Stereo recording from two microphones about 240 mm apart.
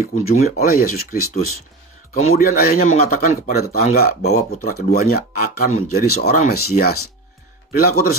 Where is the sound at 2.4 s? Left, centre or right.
Left.